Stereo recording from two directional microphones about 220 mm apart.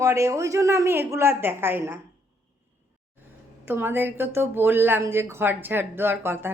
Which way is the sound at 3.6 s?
10° right (ahead or behind).